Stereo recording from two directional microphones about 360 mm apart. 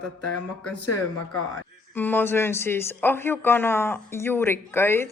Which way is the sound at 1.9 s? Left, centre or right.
Centre.